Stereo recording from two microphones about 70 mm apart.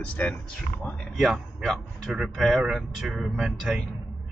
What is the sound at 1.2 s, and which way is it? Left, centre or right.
Speech, centre.